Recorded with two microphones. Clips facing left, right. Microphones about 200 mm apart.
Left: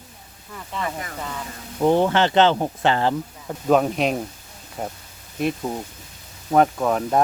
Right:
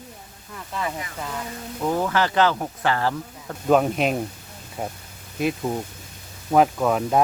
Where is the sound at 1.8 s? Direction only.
30° left (ahead or behind).